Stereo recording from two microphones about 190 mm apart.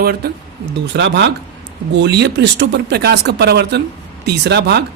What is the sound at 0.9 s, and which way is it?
A man's voice, 70° right (ahead or behind).